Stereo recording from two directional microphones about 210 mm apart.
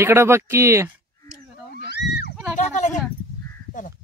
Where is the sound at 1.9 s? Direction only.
50° left (ahead or behind).